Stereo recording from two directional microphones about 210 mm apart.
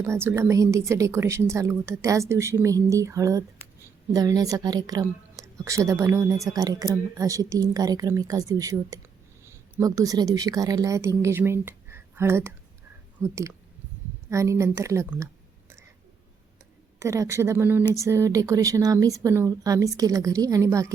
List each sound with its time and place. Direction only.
0.0 s a woman's voice: 15° right (ahead or behind)
17.0 s a woman's voice: 15° right (ahead or behind)